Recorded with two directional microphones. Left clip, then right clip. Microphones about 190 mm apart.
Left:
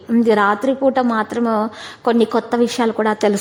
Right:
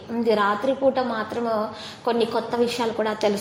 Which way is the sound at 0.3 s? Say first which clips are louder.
Left 5 dB; 40° left (ahead or behind).